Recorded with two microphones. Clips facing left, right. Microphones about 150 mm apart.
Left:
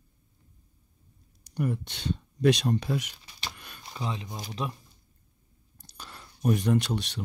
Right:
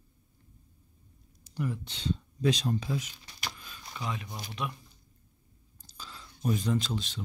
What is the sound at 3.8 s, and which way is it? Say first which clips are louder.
Speech: left 2 dB; 25° left (ahead or behind).